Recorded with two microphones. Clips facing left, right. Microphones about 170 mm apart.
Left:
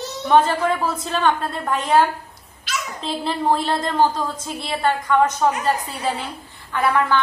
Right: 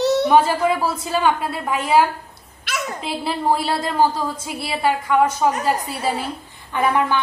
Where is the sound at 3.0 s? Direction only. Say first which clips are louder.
Left 3 dB; 5° right (ahead or behind).